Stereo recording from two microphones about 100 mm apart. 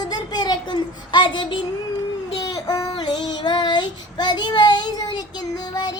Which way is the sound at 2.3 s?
45° left (ahead or behind).